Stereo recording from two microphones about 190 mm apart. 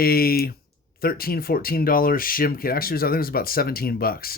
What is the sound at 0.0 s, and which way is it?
Speech, 50° left (ahead or behind).